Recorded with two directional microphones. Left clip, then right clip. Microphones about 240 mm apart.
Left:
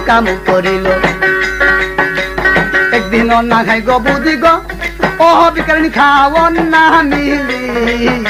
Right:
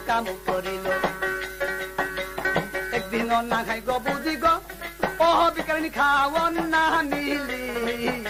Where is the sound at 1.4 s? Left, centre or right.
Left.